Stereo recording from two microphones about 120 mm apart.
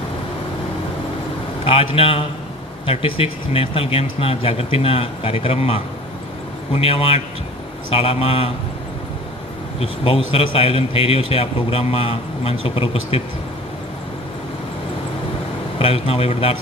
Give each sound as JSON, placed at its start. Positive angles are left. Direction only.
{"t": 1.6, "sound": "a man's voice", "side_deg": 50}
{"t": 9.8, "sound": "a man's voice", "side_deg": 55}
{"t": 15.8, "sound": "a man's voice", "side_deg": 55}